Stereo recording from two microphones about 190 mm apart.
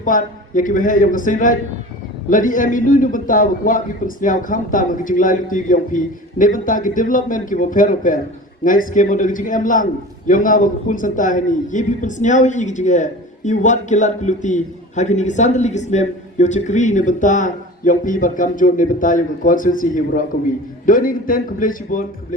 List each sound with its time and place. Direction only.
0.0 s a man's voice: 45° left (ahead or behind)